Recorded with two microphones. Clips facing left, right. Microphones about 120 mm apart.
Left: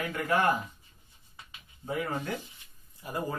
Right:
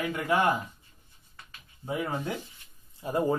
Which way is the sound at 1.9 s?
15° right (ahead or behind).